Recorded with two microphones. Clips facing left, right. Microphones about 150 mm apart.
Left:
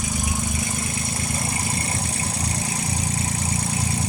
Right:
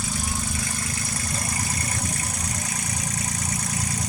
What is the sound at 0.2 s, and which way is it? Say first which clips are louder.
Vehicle: left 3 dB; 20° left (ahead or behind).